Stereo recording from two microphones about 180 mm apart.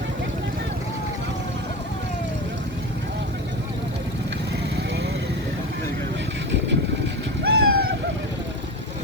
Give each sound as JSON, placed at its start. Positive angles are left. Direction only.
{"t": 7.4, "sound": "vehicle", "side_deg": -60}